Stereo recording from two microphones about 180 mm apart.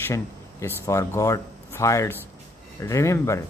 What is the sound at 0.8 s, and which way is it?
Speech, 15° left (ahead or behind).